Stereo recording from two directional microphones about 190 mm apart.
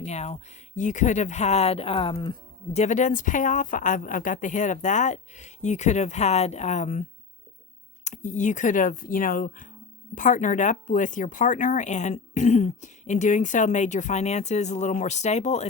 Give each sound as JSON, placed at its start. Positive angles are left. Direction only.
{"t": 0.0, "sound": "speech", "side_deg": 35}
{"t": 8.0, "sound": "speech", "side_deg": 40}